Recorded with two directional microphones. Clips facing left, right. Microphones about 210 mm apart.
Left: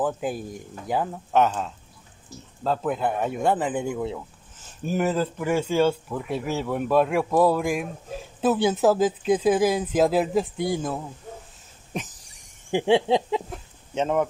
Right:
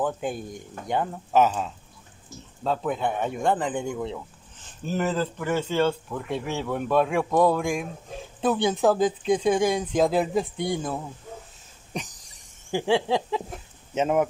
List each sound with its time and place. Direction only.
0.0 s speech: 5° left (ahead or behind)
12.7 s a sound: 20° left (ahead or behind)
13.9 s speech: 5° right (ahead or behind)